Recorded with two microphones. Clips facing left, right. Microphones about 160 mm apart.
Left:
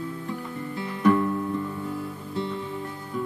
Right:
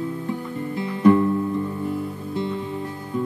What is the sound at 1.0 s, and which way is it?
Music, 30° right (ahead or behind).